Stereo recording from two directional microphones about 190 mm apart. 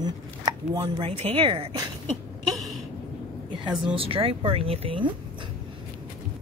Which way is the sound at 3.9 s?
30° right (ahead or behind).